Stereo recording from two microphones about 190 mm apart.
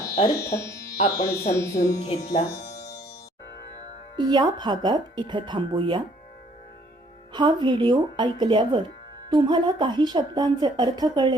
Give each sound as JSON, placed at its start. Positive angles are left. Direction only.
{"t": 0.3, "sound": "speech", "side_deg": 15}
{"t": 2.0, "sound": "speech", "side_deg": 35}
{"t": 4.2, "sound": "a woman's voice", "side_deg": -20}
{"t": 7.3, "sound": "a woman's voice", "side_deg": -25}